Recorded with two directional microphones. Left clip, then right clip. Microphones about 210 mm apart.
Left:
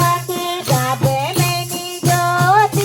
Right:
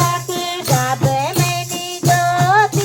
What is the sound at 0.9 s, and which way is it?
Music, 15° left (ahead or behind).